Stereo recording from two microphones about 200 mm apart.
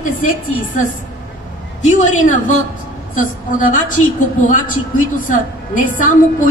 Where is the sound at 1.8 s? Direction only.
35° left (ahead or behind).